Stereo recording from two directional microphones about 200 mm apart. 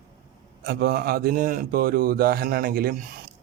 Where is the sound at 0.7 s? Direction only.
50° right (ahead or behind).